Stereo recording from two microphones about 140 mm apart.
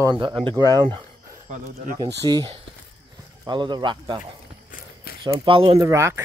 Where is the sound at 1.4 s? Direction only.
75° right (ahead or behind).